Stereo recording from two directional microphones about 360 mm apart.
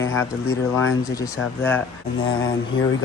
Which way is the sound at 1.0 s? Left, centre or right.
Centre.